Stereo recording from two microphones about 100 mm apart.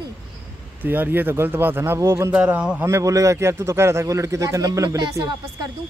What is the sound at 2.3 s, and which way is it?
Speech, 10° right (ahead or behind).